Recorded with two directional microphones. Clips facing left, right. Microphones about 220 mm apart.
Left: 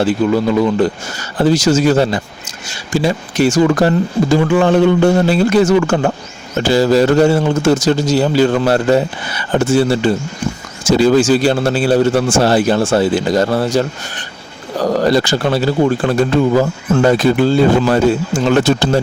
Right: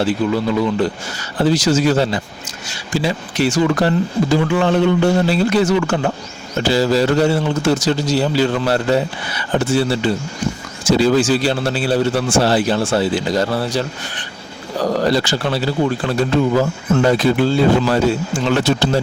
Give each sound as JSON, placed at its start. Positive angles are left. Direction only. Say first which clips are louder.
{"t": 0.6, "sound": "speech", "louder": "left 4 dB", "side_deg": 45}